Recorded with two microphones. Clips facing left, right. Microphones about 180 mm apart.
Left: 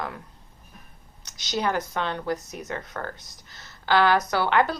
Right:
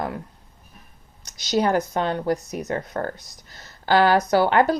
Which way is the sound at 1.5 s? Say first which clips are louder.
Right 6 dB; 40° right (ahead or behind).